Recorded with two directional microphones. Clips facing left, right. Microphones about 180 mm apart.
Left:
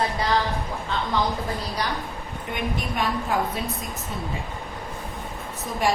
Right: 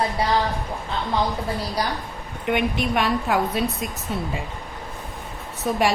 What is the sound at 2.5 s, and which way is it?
A woman's voice, 75° right (ahead or behind).